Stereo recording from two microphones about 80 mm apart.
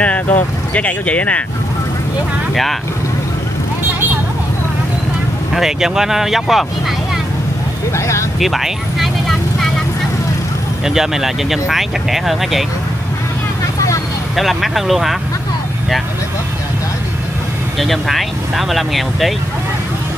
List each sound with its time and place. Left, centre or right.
0.0 s speech: centre
5.5 s speech: centre
7.9 s speech: left
8.4 s speech: centre
10.9 s speech: centre
14.3 s speech: centre
17.7 s speech: centre